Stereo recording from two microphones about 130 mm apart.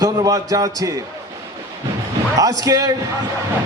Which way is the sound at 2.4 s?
25° right (ahead or behind).